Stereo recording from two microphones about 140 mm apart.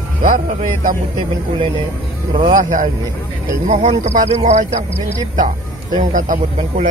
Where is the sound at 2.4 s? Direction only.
65° right (ahead or behind).